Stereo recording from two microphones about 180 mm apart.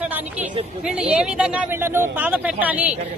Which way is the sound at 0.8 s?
5° right (ahead or behind).